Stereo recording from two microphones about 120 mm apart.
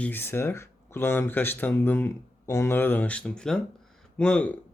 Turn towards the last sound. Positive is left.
turn(degrees=10)  # may be behind; listen again after turning